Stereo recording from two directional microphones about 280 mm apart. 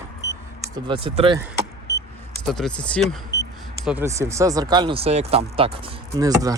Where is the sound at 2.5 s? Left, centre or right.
Centre.